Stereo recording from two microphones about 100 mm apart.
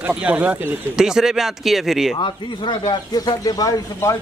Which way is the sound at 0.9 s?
5° right (ahead or behind).